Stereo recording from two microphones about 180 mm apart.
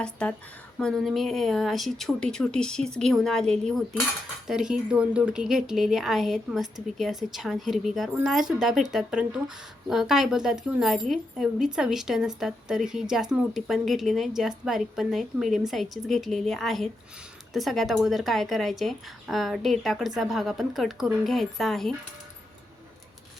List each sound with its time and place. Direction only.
0.0 s speech: 5° left (ahead or behind)